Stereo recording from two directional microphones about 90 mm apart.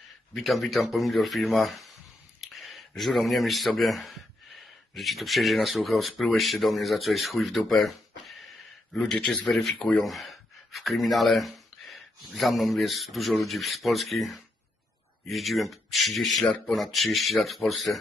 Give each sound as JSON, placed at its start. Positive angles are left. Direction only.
{"t": 0.3, "sound": "speech", "side_deg": 0}
{"t": 2.4, "sound": "a sound", "side_deg": 0}
{"t": 3.0, "sound": "speech", "side_deg": 0}
{"t": 8.9, "sound": "speech", "side_deg": 5}